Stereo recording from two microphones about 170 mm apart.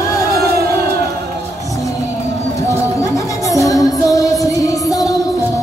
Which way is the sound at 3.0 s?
20° left (ahead or behind).